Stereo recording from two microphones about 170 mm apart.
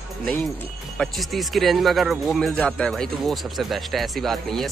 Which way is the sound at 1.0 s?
Centre (ahead or behind).